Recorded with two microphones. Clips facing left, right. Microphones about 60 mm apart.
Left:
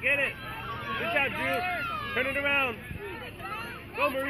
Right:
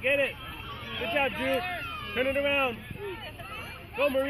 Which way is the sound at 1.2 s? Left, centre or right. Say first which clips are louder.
Right 1 dB; left.